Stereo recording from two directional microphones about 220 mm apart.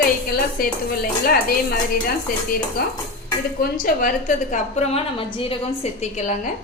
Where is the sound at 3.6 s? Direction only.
40° left (ahead or behind).